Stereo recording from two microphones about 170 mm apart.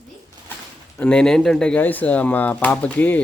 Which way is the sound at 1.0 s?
5° left (ahead or behind).